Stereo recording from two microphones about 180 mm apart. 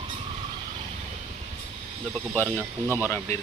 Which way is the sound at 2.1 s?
5° left (ahead or behind).